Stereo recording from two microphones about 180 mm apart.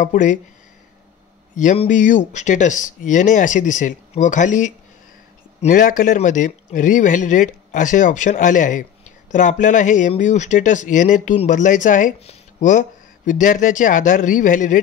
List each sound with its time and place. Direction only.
0.0 s speech: 45° left (ahead or behind)
1.6 s speech: 45° left (ahead or behind)